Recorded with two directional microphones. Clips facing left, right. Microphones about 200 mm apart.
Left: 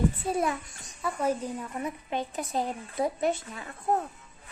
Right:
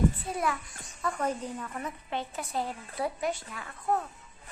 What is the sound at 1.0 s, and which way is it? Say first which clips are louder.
A woman's voice: left 3 dB; 10° left (ahead or behind).